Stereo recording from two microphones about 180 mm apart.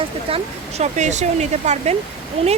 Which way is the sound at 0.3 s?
35° right (ahead or behind).